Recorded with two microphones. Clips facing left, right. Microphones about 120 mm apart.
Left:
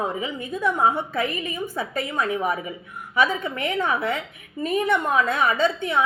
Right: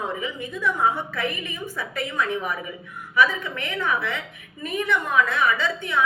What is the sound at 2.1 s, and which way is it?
Speech, 30° left (ahead or behind).